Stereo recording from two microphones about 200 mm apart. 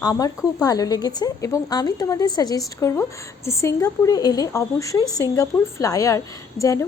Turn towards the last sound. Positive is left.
turn(degrees=15)  # may be behind; listen again after turning